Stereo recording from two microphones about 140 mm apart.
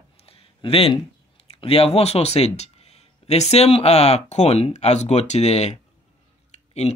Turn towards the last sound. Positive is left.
turn(degrees=50)  # may be behind; listen again after turning